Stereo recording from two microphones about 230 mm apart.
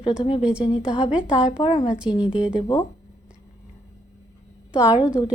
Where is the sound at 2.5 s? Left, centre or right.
Centre.